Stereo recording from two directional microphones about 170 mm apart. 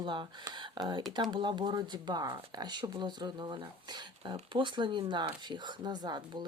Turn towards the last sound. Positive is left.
turn(degrees=-25)  # may be behind; listen again after turning